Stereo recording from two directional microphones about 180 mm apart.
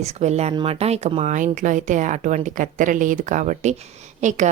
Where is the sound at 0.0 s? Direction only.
35° right (ahead or behind).